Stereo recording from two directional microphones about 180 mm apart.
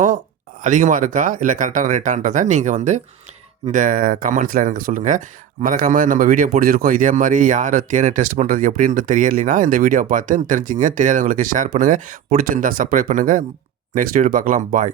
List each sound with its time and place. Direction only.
0.6 s a man's voice: 45° right (ahead or behind)